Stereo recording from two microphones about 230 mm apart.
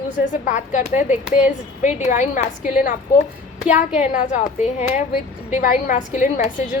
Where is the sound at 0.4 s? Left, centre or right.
Left.